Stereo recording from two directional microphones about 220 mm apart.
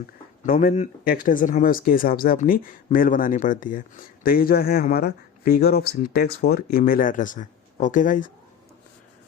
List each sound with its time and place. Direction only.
0.4 s speech: 40° left (ahead or behind)